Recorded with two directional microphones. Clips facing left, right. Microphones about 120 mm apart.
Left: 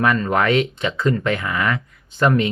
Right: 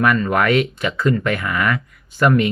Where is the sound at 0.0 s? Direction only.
25° left (ahead or behind).